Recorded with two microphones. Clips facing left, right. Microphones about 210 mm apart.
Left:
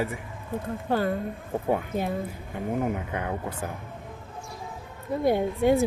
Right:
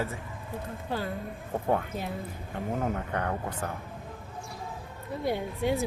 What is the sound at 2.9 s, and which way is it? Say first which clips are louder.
Speech: left 1 dB; 10° left (ahead or behind).